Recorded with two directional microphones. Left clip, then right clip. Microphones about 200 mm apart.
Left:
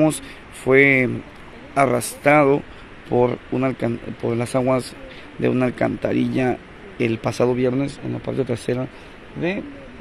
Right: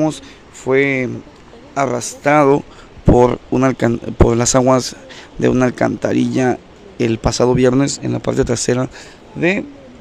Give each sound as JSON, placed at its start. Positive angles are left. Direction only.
{"t": 0.7, "sound": "a man's voice", "side_deg": 0}
{"t": 3.2, "sound": "a man's voice", "side_deg": -25}